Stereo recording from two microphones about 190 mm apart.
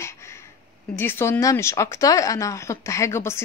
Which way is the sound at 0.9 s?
10° left (ahead or behind).